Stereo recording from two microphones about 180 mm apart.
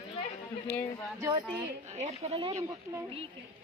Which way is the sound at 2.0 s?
35° right (ahead or behind).